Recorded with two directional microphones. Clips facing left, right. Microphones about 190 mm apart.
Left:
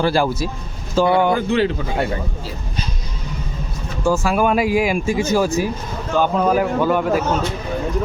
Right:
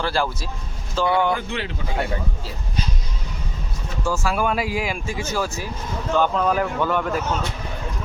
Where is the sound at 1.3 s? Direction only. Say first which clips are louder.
Left 8 dB; 35° left (ahead or behind).